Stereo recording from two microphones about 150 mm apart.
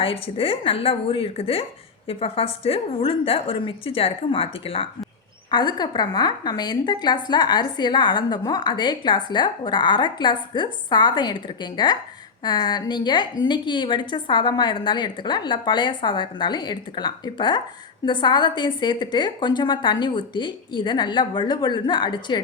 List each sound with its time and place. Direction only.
0.0 s a woman's voice: 40° left (ahead or behind)